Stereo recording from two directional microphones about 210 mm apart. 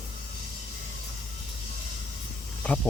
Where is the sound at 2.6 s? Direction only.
5° left (ahead or behind).